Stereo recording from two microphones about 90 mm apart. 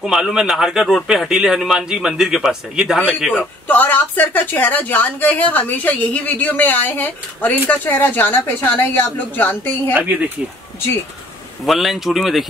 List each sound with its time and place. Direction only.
0.0 s speech: 5° right (ahead or behind)
3.6 s a woman's voice: 20° left (ahead or behind)
11.6 s speech: centre (ahead or behind)